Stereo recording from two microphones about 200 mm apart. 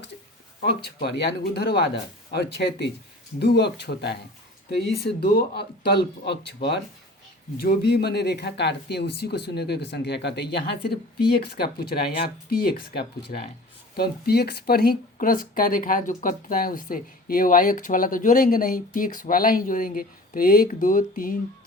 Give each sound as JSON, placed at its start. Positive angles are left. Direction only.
{"t": 0.9, "sound": "speech", "side_deg": 55}